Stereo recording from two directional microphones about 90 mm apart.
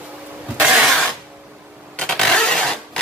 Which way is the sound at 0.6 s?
10° right (ahead or behind).